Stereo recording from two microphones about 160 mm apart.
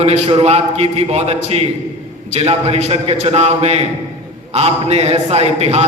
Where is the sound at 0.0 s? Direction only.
45° right (ahead or behind).